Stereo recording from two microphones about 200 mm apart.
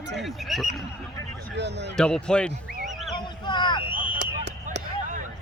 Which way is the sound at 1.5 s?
60° right (ahead or behind).